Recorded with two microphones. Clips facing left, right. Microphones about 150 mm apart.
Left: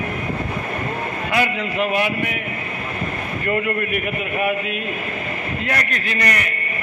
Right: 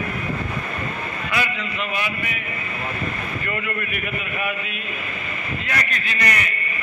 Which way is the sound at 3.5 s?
50° left (ahead or behind).